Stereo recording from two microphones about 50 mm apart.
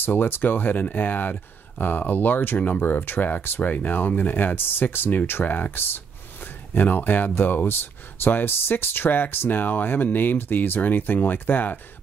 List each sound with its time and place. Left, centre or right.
0.0 s speech: left